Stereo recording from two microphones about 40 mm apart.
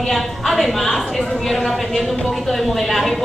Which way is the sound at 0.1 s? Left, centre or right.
Centre.